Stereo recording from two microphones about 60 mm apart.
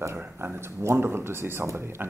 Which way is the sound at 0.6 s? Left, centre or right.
Right.